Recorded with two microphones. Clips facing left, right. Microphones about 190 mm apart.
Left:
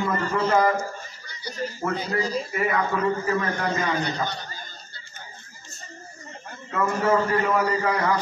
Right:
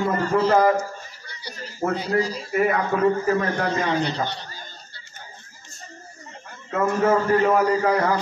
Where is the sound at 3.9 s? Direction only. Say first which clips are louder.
Right 3 dB; 30° right (ahead or behind).